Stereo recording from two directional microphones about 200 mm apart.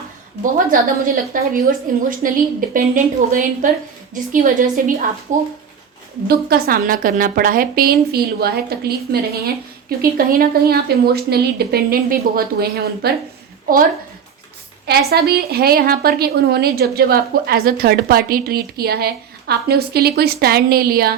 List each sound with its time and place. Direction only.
0.5 s a woman's voice: 45° right (ahead or behind)
6.2 s a woman's voice: 50° right (ahead or behind)
14.8 s a woman's voice: 50° right (ahead or behind)